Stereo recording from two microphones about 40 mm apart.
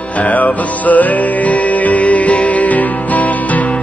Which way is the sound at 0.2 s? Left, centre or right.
Left.